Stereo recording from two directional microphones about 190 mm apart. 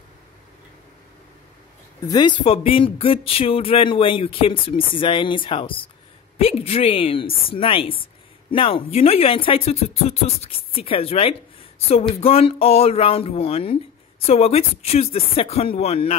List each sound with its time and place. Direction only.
2.0 s speech: 25° left (ahead or behind)